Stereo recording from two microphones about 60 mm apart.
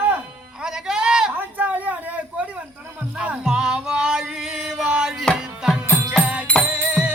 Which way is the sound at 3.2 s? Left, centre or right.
Centre.